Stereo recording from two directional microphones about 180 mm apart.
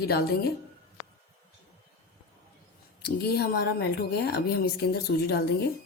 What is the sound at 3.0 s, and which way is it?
A woman's voice, 60° left (ahead or behind).